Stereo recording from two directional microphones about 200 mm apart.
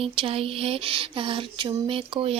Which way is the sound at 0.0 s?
30° right (ahead or behind).